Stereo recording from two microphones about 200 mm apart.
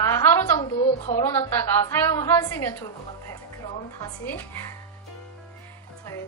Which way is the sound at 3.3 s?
15° left (ahead or behind).